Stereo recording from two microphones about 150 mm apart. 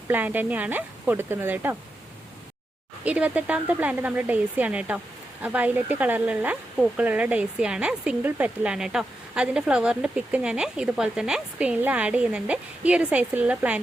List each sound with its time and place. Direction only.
0.1 s speech: 10° right (ahead or behind)
3.0 s speech: 10° right (ahead or behind)